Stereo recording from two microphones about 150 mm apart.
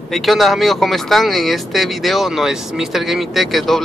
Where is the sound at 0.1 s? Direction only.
Centre (ahead or behind).